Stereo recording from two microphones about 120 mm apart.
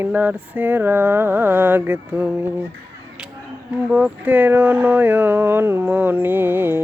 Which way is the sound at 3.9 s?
10° right (ahead or behind).